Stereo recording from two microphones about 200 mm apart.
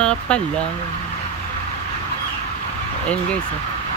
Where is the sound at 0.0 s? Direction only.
5° left (ahead or behind).